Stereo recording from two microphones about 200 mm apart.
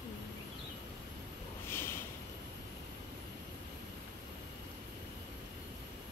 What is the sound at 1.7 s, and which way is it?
Vehicle, 10° left (ahead or behind).